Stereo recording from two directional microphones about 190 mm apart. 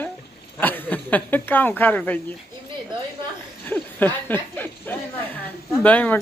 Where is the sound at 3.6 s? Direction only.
10° left (ahead or behind).